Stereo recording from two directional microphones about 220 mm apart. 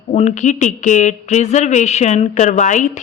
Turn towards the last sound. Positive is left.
turn(degrees=35)  # may be behind; listen again after turning